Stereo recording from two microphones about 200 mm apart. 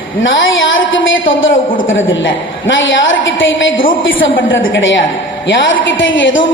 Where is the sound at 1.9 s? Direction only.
75° left (ahead or behind).